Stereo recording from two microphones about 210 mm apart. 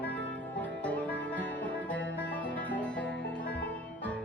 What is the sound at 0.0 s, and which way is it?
Music, 5° left (ahead or behind).